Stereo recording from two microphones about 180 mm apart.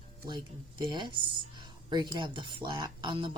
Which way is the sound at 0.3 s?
25° right (ahead or behind).